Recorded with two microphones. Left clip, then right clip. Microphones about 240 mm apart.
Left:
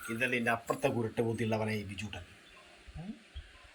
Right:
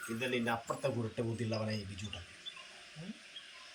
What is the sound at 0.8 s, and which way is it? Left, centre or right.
Speech, left.